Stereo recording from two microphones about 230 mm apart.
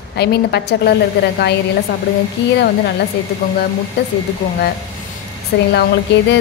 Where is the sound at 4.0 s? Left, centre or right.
Left.